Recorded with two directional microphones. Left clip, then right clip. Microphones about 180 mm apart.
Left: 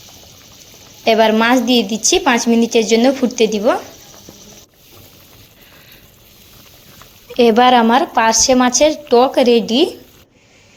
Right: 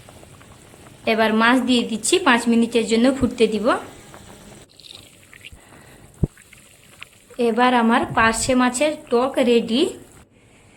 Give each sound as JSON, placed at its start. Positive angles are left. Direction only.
{"t": 1.0, "sound": "a woman's voice", "side_deg": 20}
{"t": 7.3, "sound": "a woman's voice", "side_deg": 40}